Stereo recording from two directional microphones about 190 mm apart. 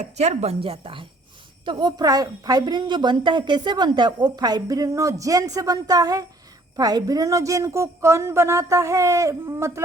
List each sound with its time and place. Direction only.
0.0 s a woman's voice: 35° right (ahead or behind); by 9.8 s 15° right (ahead or behind)